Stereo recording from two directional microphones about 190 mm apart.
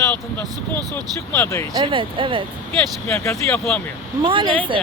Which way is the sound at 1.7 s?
25° right (ahead or behind).